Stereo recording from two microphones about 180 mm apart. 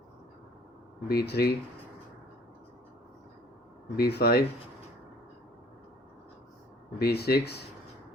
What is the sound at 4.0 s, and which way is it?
Speech, 65° left (ahead or behind).